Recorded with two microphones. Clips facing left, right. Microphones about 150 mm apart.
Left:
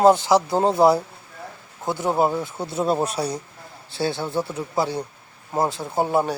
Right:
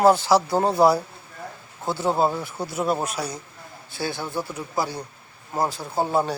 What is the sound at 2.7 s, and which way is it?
Speech, 30° left (ahead or behind).